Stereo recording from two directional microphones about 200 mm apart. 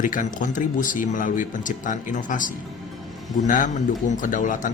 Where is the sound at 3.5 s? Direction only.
40° left (ahead or behind).